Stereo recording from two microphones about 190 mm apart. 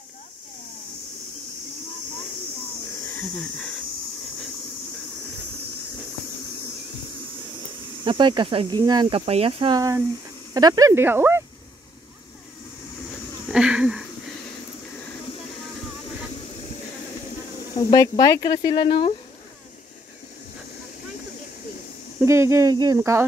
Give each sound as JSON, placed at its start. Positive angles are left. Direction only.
{"t": 3.1, "sound": "a sound", "side_deg": 10}
{"t": 8.0, "sound": "speech", "side_deg": -25}
{"t": 13.5, "sound": "speech", "side_deg": -5}
{"t": 17.7, "sound": "speech", "side_deg": 20}
{"t": 22.2, "sound": "speech", "side_deg": -15}